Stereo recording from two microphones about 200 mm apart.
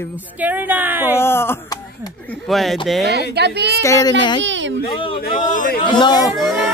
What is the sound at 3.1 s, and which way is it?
Speech, 55° right (ahead or behind).